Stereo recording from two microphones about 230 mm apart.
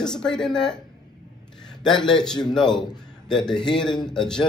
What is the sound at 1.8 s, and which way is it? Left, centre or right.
Speech, centre.